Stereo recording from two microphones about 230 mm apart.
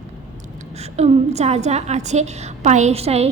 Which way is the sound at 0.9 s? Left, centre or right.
Right.